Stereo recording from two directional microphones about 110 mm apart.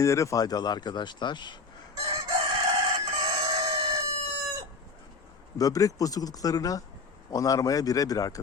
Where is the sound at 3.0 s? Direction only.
40° right (ahead or behind).